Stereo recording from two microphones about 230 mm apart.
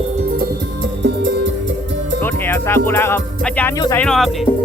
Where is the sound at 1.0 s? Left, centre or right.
Right.